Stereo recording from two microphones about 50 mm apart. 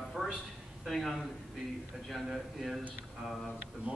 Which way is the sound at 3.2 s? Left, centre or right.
Centre.